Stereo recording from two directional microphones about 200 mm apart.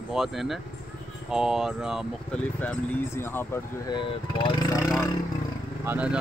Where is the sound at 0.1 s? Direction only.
Centre (ahead or behind); by 5.1 s 20° left (ahead or behind).